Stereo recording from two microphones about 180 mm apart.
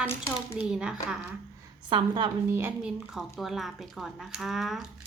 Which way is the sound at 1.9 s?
25° right (ahead or behind).